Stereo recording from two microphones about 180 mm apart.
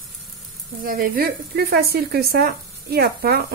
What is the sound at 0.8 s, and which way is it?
Speech, 55° right (ahead or behind).